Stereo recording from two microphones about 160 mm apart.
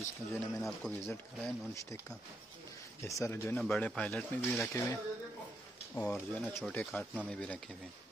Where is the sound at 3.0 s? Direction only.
20° left (ahead or behind).